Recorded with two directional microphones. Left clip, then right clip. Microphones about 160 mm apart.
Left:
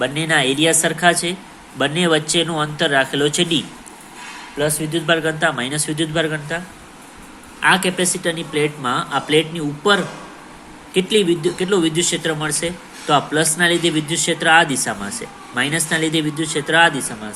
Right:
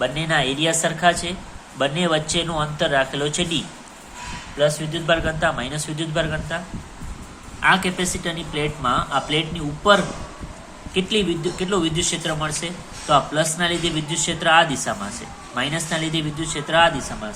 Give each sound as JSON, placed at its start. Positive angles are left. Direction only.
{"t": 0.0, "sound": "a woman's voice", "side_deg": 20}
{"t": 7.6, "sound": "a woman's voice", "side_deg": 20}